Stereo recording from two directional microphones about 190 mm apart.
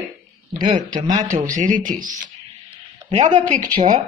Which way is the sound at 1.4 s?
40° right (ahead or behind).